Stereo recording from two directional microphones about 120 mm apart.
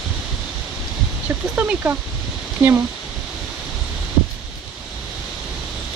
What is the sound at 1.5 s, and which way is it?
Speech, 15° right (ahead or behind).